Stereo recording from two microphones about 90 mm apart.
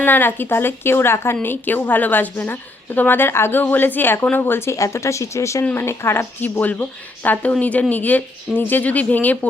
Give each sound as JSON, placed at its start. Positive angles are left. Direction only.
{"t": 0.0, "sound": "a woman's voice", "side_deg": 20}